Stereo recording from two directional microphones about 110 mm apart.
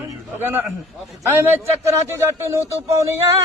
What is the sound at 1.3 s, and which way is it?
Speech, 20° right (ahead or behind).